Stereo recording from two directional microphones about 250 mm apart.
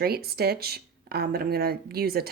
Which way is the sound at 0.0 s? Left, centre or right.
Right.